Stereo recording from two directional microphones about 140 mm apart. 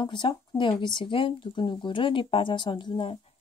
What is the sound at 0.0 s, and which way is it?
A woman's voice, 35° left (ahead or behind).